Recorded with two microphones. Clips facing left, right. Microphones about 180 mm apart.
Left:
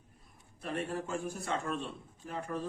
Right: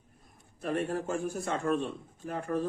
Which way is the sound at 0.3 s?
50° right (ahead or behind).